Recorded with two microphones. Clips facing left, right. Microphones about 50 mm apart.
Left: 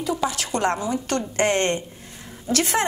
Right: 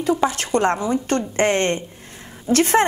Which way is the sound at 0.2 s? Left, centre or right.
Right.